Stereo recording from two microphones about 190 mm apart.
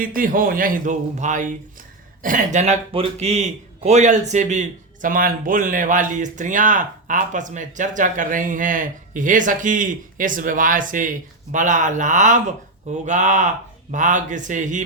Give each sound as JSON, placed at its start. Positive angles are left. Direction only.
{"t": 0.0, "sound": "a man's voice", "side_deg": -45}